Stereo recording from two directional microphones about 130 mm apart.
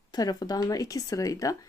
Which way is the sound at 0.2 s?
30° left (ahead or behind).